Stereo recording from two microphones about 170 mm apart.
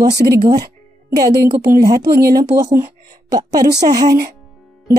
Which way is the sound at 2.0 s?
70° right (ahead or behind).